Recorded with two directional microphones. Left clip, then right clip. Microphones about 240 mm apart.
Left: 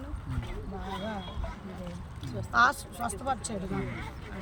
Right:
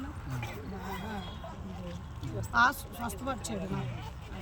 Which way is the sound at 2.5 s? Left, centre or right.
Centre.